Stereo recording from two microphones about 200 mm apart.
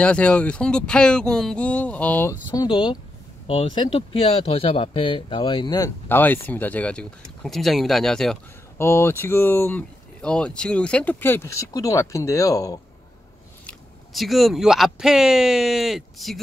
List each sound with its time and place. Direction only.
0.0 s speech: 5° left (ahead or behind)
2.5 s speech: 20° left (ahead or behind)
6.0 s speech: 10° left (ahead or behind)
13.7 s speech: centre (ahead or behind)